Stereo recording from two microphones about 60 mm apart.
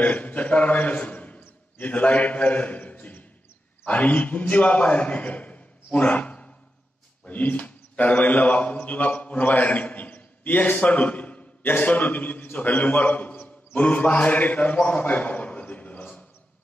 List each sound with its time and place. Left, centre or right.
0.0 s a man's voice: left